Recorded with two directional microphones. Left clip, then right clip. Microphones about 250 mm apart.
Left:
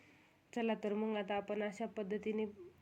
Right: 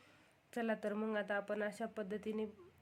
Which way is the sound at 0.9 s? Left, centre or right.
Centre.